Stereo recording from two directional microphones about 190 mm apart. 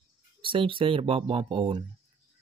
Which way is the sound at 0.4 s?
25° right (ahead or behind).